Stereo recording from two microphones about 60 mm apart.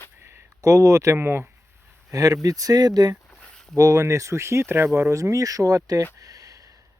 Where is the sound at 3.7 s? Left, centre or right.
Right.